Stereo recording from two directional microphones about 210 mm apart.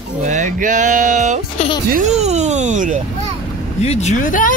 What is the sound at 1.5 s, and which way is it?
Speech, 25° left (ahead or behind).